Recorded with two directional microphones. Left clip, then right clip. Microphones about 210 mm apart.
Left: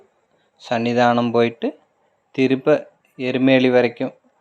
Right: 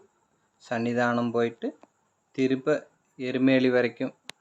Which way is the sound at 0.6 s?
15° left (ahead or behind).